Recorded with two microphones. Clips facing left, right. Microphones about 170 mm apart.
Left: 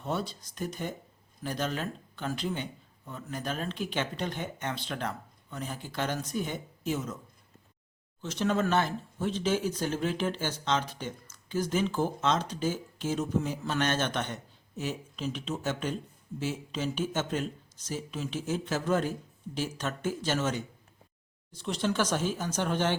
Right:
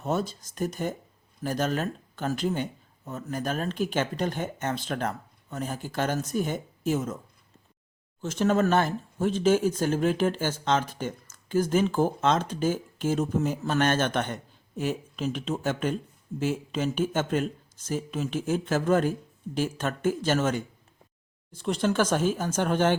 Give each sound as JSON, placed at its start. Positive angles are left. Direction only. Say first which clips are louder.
{"t": 0.0, "sound": "speech", "louder": "right 5 dB", "side_deg": -45}
{"t": 8.2, "sound": "speech", "louder": "right 5 dB", "side_deg": -45}